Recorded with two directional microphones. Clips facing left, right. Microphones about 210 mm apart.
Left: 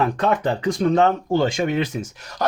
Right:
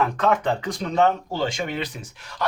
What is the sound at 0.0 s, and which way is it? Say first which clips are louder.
Speech: left 1 dB; 35° left (ahead or behind).